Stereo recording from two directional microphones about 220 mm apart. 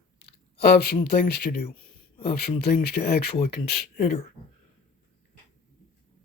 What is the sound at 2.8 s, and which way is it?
Speech, 45° left (ahead or behind).